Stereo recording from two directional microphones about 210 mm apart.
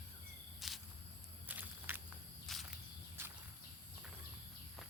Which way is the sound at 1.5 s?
10° right (ahead or behind).